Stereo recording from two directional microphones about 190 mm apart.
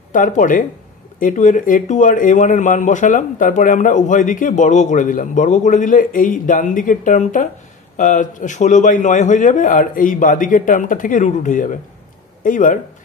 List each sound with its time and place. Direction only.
0.1 s speech: 45° left (ahead or behind)